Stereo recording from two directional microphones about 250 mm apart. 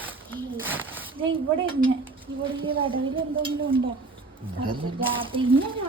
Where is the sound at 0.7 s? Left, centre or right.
Centre.